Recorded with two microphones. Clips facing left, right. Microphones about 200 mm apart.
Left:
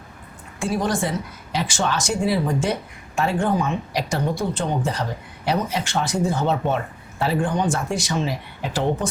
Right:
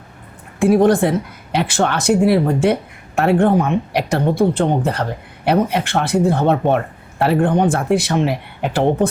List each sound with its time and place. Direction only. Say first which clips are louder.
0.6 s speech: right 10 dB; 60° right (ahead or behind)